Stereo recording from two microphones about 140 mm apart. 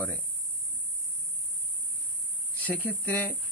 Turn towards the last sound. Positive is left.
turn(degrees=10)  # may be behind; listen again after turning